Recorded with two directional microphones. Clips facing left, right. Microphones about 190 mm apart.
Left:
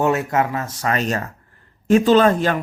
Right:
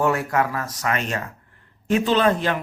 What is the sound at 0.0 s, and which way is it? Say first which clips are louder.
Speech: left 2 dB; 20° left (ahead or behind).